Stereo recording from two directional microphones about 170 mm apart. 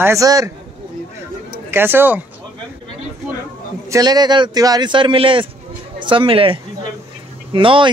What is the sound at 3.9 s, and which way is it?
Speech, 25° right (ahead or behind).